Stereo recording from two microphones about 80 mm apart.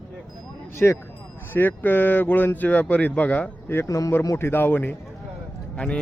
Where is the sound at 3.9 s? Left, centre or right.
Left.